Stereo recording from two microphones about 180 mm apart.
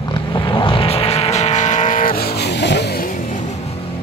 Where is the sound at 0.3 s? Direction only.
30° left (ahead or behind); by 2.8 s 70° left (ahead or behind).